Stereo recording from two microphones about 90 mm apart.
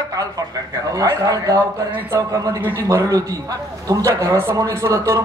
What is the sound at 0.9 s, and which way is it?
A man's voice, 40° right (ahead or behind).